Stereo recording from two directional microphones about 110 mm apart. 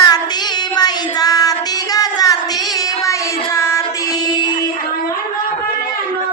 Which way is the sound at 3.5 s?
25° left (ahead or behind).